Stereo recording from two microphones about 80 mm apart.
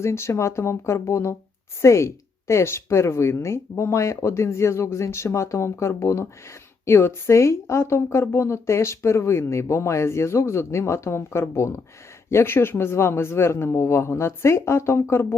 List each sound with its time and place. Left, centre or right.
0.0 s a woman's voice: left